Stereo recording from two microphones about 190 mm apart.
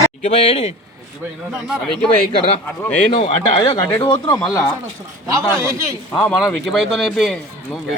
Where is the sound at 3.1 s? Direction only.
25° left (ahead or behind).